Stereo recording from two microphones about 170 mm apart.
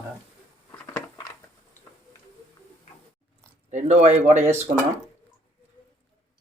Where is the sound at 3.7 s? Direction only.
40° right (ahead or behind).